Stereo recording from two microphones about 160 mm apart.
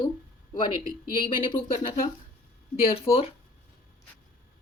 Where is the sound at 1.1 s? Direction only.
30° left (ahead or behind).